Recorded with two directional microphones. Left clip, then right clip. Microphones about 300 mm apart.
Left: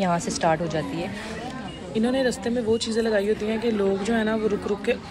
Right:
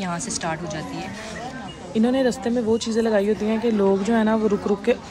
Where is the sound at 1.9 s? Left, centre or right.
Right.